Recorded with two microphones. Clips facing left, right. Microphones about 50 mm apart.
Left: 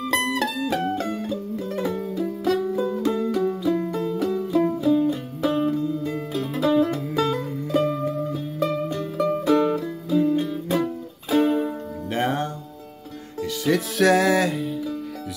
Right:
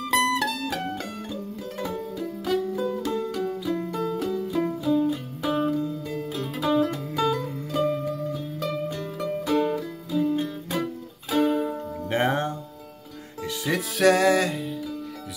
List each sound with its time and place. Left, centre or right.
0.0 s music: centre
10.7 s music: centre
12.1 s music: right
13.7 s music: centre